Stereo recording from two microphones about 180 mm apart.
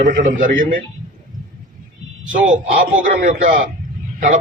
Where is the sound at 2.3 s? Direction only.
50° right (ahead or behind).